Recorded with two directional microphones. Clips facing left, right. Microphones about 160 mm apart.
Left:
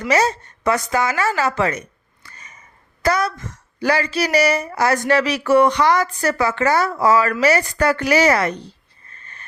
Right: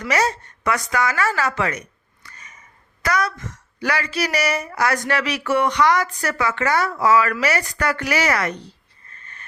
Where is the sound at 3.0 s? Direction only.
30° left (ahead or behind).